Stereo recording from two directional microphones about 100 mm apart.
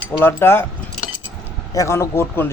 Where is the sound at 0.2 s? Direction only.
20° left (ahead or behind).